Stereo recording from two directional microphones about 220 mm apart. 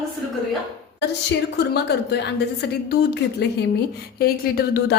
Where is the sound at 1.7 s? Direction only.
50° left (ahead or behind).